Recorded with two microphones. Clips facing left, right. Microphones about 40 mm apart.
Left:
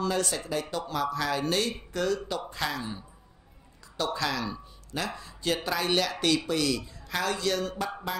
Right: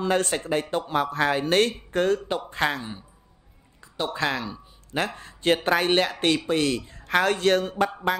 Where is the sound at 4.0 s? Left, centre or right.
Right.